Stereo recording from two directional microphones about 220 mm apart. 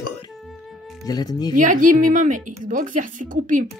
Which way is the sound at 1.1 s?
15° left (ahead or behind).